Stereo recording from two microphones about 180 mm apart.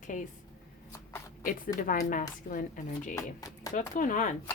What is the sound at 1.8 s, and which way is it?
Speech, 50° left (ahead or behind).